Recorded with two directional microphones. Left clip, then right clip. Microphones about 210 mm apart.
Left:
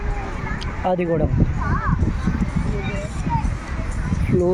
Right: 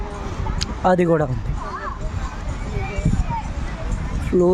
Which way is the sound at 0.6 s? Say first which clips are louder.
Right 5 dB; 25° right (ahead or behind).